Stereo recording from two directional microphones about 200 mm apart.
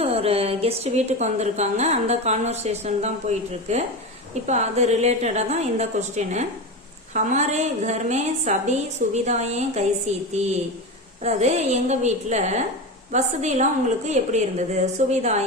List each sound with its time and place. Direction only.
0.0 s a woman's voice: 30° right (ahead or behind)